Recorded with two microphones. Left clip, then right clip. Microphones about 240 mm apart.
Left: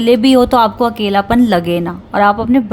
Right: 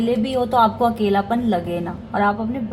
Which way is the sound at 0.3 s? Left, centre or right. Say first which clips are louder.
Left 8 dB; left.